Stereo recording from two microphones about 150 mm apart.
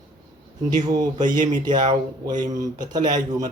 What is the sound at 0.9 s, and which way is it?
Speech, 25° right (ahead or behind).